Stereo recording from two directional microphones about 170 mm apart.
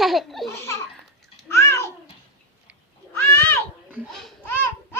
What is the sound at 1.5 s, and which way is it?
Babbling, 15° left (ahead or behind).